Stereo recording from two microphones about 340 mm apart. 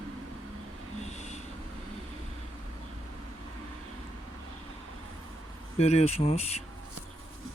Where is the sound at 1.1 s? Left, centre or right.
Centre.